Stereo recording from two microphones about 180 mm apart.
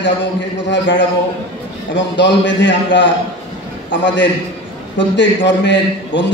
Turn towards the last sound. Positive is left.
turn(degrees=90)